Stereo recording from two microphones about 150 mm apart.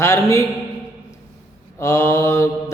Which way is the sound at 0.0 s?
20° left (ahead or behind).